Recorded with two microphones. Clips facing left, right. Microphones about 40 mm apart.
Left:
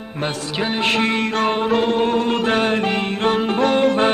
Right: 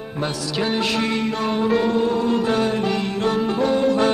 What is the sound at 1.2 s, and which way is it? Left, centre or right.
Music, left.